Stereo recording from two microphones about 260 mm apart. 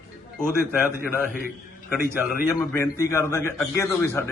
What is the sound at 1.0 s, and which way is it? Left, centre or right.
Speech, left.